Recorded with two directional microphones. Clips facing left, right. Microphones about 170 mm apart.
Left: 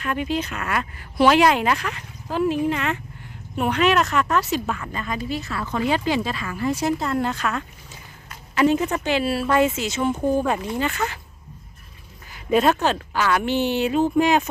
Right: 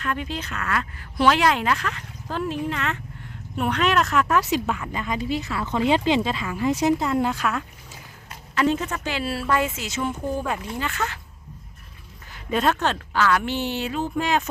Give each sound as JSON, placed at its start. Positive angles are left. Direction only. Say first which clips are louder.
{"t": 0.0, "sound": "a woman's voice", "louder": "left 4 dB", "side_deg": 10}
{"t": 8.5, "sound": "speech", "louder": "left 4 dB", "side_deg": 10}
{"t": 12.3, "sound": "speech", "louder": "left 4 dB", "side_deg": 10}